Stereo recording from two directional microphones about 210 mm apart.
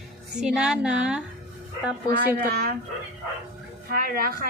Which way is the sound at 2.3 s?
50° right (ahead or behind).